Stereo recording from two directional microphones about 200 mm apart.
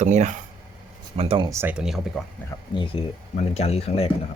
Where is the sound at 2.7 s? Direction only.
25° left (ahead or behind).